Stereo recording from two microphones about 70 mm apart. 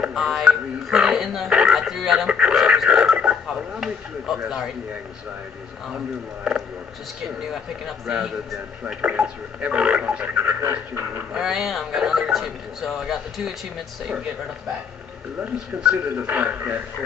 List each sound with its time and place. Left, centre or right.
0.0 s speech: centre
4.5 s speech: centre
5.9 s speech: centre
8.8 s speech: centre
11.3 s speech: centre
15.4 s speech: centre